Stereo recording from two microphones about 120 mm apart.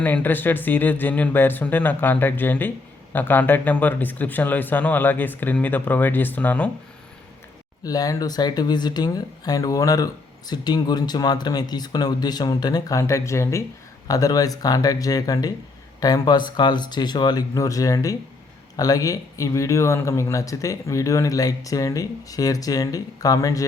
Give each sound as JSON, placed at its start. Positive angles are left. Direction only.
{"t": 0.0, "sound": "speech", "side_deg": 15}
{"t": 7.9, "sound": "speech", "side_deg": 30}